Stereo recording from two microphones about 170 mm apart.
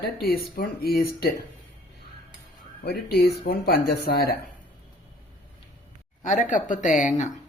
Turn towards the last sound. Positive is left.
turn(degrees=45)  # may be behind; listen again after turning